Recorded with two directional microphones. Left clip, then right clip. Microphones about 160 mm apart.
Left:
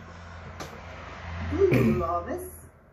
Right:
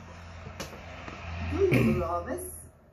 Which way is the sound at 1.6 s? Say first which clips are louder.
Left 3 dB; 5° left (ahead or behind).